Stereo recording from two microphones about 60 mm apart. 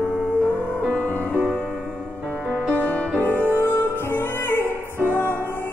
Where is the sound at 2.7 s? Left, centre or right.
Left.